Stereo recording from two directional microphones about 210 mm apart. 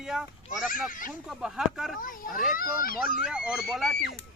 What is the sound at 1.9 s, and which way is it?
A child's voice, 40° left (ahead or behind).